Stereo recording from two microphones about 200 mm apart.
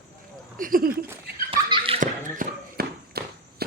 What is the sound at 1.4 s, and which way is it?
Bouncing, 25° right (ahead or behind).